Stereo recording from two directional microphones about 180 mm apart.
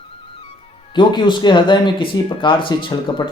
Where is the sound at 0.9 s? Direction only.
25° left (ahead or behind).